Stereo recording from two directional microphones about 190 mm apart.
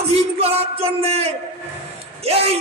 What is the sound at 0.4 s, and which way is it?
Music, 30° right (ahead or behind).